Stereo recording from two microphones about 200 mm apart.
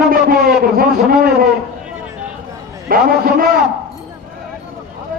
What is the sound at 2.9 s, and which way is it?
Speech, 45° right (ahead or behind).